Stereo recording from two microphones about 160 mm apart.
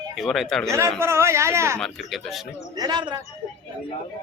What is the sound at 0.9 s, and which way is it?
Speech, 15° right (ahead or behind).